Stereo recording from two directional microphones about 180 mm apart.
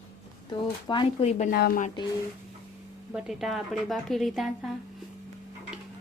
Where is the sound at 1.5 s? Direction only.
55° left (ahead or behind).